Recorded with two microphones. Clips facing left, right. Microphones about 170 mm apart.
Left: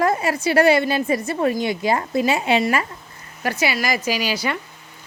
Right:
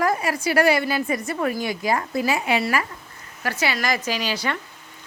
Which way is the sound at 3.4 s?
15° left (ahead or behind).